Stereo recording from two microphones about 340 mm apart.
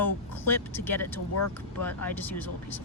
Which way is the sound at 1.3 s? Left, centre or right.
Left.